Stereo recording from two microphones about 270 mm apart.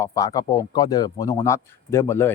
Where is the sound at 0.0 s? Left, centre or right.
Centre.